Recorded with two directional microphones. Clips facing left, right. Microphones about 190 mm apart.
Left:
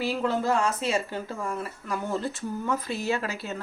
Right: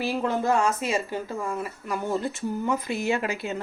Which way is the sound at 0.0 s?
20° right (ahead or behind).